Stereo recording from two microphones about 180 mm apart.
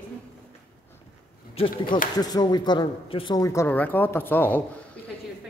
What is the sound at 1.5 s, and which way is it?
Speech, 30° left (ahead or behind).